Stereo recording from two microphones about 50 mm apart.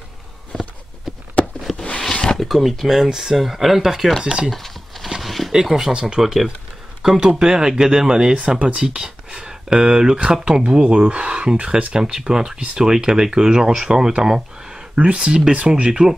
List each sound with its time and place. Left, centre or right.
0.5 s walk: centre
1.1 s a sound: centre
1.8 s a sound: centre
2.4 s speech: centre
4.5 s a sound: centre
5.5 s speech: centre
6.2 s speech: centre
7.2 s speech: centre
15.0 s speech: right